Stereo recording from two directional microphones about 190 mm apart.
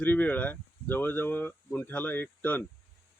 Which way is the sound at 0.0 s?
10° left (ahead or behind).